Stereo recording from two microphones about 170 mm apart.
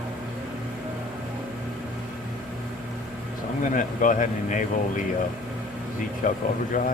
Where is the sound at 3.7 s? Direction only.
50° left (ahead or behind).